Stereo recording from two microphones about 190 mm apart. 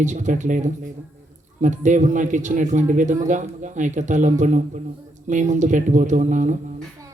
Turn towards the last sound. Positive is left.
turn(degrees=-40)  # may be behind; listen again after turning